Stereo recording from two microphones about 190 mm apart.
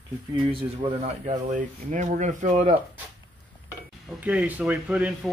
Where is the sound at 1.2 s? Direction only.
40° right (ahead or behind).